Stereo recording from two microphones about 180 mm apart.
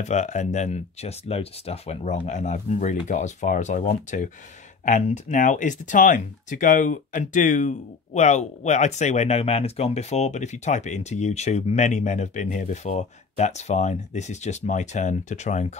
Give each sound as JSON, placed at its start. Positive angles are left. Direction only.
{"t": 0.0, "sound": "speech", "side_deg": 40}